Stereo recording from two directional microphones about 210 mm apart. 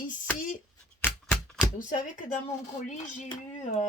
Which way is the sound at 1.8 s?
40° left (ahead or behind).